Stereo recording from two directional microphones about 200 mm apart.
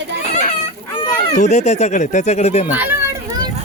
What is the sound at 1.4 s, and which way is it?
Speech, 35° left (ahead or behind).